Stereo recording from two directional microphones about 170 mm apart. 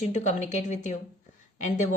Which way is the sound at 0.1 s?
45° left (ahead or behind).